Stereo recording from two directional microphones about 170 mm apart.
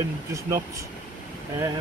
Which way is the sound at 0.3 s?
20° right (ahead or behind).